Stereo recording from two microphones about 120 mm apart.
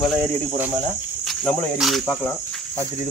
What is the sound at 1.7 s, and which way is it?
Cricket, centre (ahead or behind).